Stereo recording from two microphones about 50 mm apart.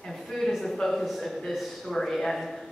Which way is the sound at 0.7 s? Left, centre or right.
Centre.